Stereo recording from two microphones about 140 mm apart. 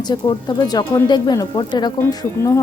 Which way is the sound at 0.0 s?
30° left (ahead or behind).